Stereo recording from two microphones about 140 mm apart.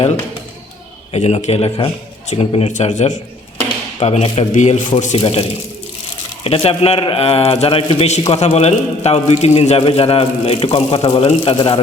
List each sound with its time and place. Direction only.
1.1 s a man's voice: 55° left (ahead or behind)
5.1 s a man's voice: 40° left (ahead or behind)